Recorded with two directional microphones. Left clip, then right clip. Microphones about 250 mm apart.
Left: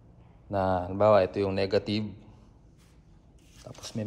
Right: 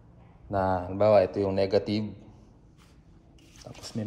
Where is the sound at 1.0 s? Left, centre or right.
Centre.